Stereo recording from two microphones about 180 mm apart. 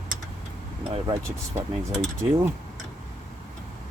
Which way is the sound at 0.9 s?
25° right (ahead or behind).